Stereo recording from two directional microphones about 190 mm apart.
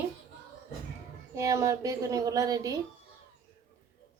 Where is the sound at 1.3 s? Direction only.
15° right (ahead or behind).